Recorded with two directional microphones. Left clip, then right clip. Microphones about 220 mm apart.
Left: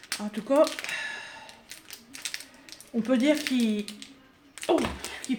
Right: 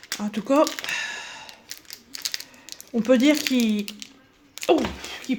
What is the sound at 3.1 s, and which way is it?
Speech, 50° right (ahead or behind).